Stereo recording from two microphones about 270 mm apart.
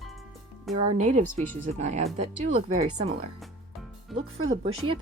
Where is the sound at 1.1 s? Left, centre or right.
Right.